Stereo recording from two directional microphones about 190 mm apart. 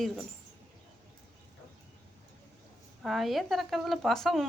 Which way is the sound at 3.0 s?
Centre (ahead or behind).